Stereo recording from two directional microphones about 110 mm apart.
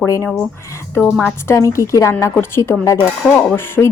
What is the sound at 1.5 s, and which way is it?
Speech, 25° left (ahead or behind).